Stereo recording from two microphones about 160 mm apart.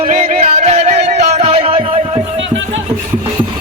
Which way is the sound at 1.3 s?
40° right (ahead or behind).